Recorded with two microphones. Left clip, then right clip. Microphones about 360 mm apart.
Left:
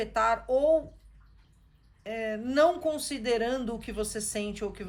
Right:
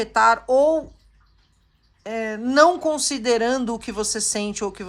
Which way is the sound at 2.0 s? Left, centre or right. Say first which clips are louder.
Right 6 dB; centre.